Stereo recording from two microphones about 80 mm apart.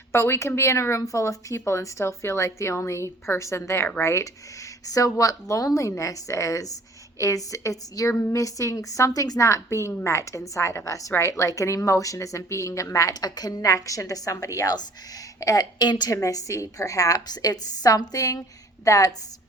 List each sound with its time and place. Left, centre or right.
0.1 s a woman's voice: left
15.8 s a woman's voice: left
16.1 s a woman's voice: left